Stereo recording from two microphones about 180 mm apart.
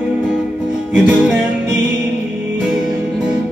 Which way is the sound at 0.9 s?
5° right (ahead or behind).